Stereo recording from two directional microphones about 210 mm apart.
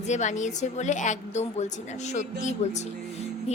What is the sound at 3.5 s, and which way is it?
Music, 30° left (ahead or behind).